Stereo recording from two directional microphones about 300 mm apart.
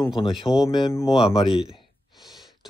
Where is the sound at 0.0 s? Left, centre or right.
Centre.